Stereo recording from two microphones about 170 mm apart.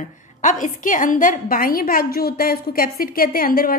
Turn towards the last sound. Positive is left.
turn(degrees=60)  # may be behind; listen again after turning